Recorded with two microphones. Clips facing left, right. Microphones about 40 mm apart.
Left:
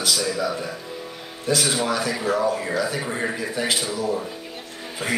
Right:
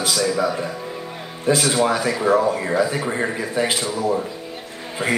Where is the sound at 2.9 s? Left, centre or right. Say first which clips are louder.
Right 3 dB; centre.